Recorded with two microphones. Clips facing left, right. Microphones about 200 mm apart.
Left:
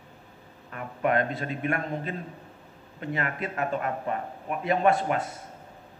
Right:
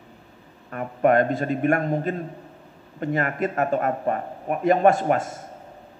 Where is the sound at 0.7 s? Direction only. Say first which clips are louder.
Right 7 dB; 45° right (ahead or behind).